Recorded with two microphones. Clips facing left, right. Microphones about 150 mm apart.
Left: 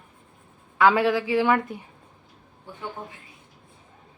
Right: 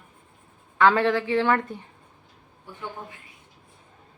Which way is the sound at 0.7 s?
10° left (ahead or behind).